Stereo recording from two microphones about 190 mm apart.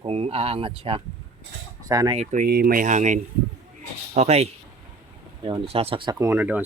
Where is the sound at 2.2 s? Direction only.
40° right (ahead or behind).